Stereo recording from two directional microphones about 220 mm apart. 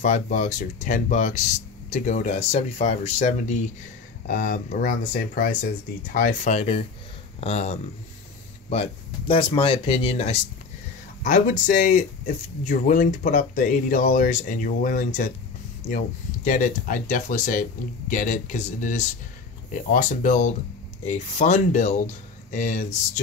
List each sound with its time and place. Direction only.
0.0 s speech: 35° left (ahead or behind)
9.3 s speech: 20° left (ahead or behind)
16.4 s speech: 35° left (ahead or behind)